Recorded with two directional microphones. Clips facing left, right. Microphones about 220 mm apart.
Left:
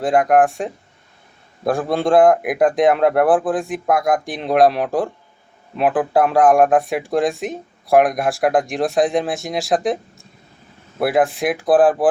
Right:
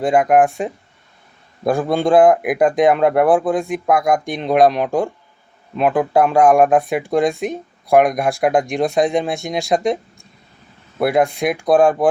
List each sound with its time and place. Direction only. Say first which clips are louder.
0.0 s speech: right 1 dB; centre (ahead or behind)